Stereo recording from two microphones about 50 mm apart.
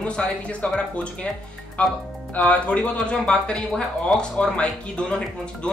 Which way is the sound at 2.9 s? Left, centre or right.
Centre.